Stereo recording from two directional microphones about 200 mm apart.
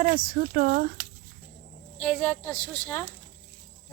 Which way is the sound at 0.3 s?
45° right (ahead or behind).